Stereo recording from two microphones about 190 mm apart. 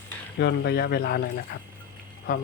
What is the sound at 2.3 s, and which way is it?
Speech, 45° left (ahead or behind).